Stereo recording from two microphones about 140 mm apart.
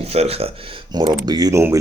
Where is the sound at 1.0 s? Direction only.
30° right (ahead or behind).